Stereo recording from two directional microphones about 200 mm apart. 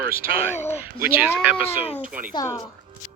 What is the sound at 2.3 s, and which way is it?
Speech, 15° left (ahead or behind).